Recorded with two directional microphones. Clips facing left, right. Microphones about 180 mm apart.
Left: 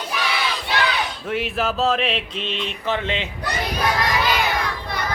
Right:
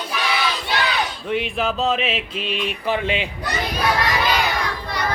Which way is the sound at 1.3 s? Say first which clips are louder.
Even; 5° left (ahead or behind).